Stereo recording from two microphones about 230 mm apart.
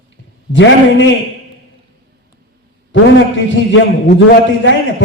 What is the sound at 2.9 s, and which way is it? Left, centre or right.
A man's voice, left.